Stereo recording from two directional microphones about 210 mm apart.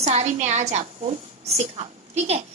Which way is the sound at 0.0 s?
30° right (ahead or behind).